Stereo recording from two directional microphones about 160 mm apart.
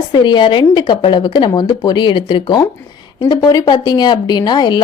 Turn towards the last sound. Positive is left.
turn(degrees=30)  # may be behind; listen again after turning